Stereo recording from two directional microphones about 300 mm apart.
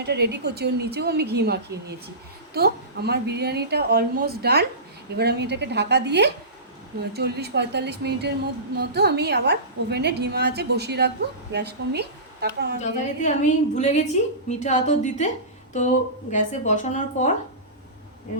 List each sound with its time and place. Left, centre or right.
0.0 s a woman's voice: right
12.8 s speech: left